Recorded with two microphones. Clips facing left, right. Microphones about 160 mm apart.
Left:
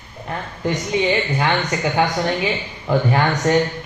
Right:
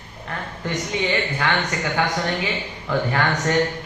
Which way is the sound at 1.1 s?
20° left (ahead or behind).